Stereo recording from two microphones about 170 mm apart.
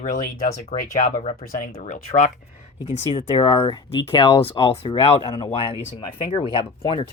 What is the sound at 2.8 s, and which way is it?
Speech, 30° left (ahead or behind).